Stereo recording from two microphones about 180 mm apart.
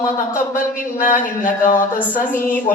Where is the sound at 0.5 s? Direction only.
45° left (ahead or behind).